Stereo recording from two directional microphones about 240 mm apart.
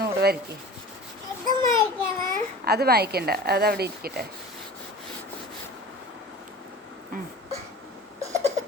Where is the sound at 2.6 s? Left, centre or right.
Right.